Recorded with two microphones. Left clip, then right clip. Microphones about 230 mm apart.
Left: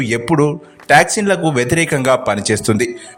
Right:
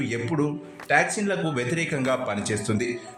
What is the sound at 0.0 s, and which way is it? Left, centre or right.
A man's voice, left.